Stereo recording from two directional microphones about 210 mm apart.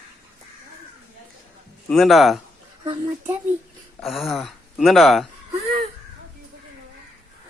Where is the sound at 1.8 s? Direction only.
Centre (ahead or behind).